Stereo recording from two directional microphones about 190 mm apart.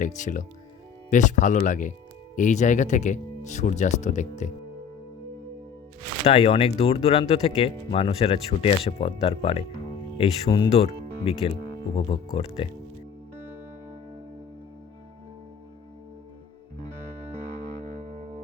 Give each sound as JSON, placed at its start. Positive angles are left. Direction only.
{"t": 0.0, "sound": "speech", "side_deg": 40}
{"t": 6.2, "sound": "speech", "side_deg": 30}
{"t": 11.9, "sound": "speech", "side_deg": 30}
{"t": 18.2, "sound": "music", "side_deg": -35}